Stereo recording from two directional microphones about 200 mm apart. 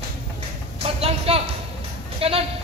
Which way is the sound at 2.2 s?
30° right (ahead or behind).